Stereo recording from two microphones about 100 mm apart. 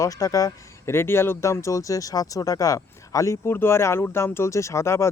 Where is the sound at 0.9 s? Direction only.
25° left (ahead or behind).